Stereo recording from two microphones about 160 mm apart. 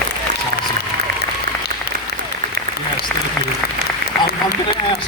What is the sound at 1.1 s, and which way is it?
Applause, 80° right.